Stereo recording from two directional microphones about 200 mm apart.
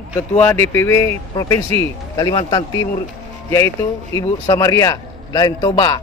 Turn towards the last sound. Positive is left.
turn(degrees=20)  # may be behind; listen again after turning